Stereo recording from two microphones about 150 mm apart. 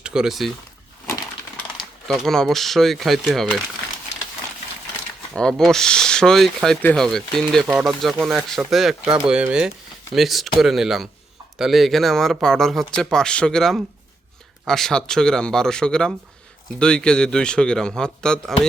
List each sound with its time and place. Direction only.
0.0 s speech: 5° right (ahead or behind)
2.0 s speech: 5° left (ahead or behind)
5.3 s speech: 5° left (ahead or behind)